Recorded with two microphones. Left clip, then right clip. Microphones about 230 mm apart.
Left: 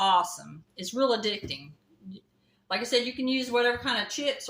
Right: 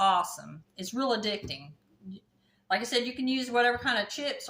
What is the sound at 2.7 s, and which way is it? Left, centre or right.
Speech, right.